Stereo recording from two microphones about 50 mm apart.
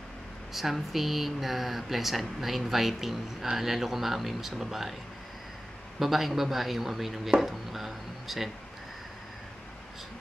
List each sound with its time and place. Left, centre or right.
0.5 s speech: centre
5.9 s speech: centre